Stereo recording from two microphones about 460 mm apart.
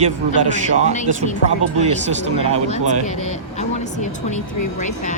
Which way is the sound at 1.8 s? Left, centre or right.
Centre.